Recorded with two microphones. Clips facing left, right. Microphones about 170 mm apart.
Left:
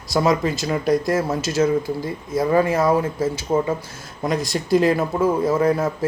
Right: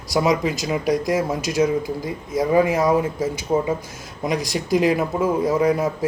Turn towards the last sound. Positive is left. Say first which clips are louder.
# even
turn(degrees=-15)  # may be behind; listen again after turning